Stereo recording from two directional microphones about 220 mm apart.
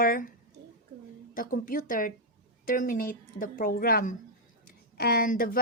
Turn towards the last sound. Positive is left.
turn(degrees=40)  # may be behind; listen again after turning